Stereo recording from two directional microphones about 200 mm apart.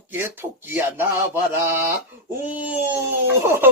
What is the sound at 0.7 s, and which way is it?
Speech, 10° right (ahead or behind).